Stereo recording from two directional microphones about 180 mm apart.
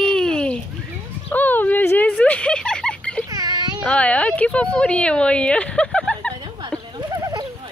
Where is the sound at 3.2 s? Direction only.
20° right (ahead or behind).